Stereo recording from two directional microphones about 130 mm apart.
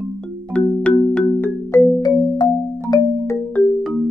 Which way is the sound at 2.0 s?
30° left (ahead or behind).